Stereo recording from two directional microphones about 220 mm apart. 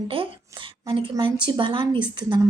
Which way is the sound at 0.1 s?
25° right (ahead or behind).